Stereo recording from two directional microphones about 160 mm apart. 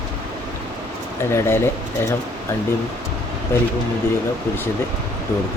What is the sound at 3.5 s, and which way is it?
Speech, 15° left (ahead or behind).